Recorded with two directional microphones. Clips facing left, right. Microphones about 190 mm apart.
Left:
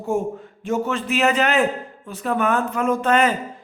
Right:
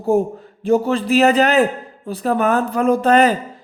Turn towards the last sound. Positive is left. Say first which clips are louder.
# right 5 dB
turn(degrees=-35)  # may be behind; listen again after turning